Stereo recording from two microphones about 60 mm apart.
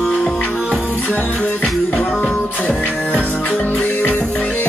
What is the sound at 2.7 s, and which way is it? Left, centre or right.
Music, left.